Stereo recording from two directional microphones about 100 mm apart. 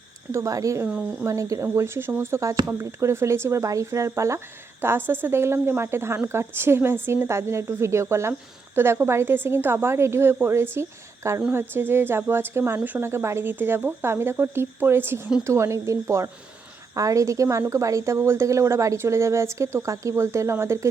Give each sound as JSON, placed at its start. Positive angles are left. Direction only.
{"t": 0.3, "sound": "a woman's voice", "side_deg": -30}